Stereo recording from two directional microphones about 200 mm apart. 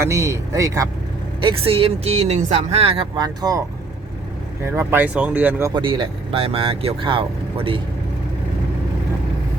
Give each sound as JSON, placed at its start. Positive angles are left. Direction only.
{"t": 0.0, "sound": "speech", "side_deg": -15}
{"t": 4.6, "sound": "speech", "side_deg": -15}
{"t": 5.7, "sound": "speech", "side_deg": -25}